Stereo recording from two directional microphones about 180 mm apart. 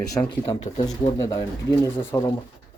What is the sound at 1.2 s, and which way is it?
Speech, 15° left (ahead or behind).